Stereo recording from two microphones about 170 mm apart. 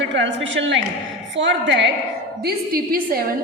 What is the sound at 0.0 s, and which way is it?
A woman's voice, 90° right.